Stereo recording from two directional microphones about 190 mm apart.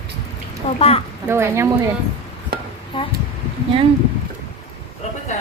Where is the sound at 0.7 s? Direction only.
30° left (ahead or behind).